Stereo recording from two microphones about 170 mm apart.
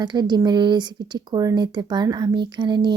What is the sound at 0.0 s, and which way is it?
Speech, 25° right (ahead or behind).